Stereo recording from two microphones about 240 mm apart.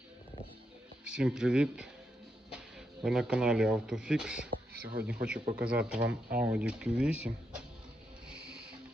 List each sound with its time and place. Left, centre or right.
1.0 s speech: centre
3.0 s speech: centre
4.8 s speech: right
5.0 s speech: centre
8.3 s music: centre